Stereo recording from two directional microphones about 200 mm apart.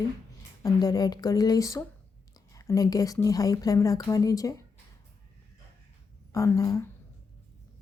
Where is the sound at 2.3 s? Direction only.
15° left (ahead or behind).